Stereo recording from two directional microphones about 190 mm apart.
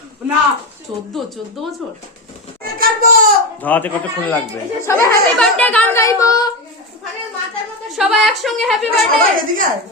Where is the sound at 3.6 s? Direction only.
10° left (ahead or behind).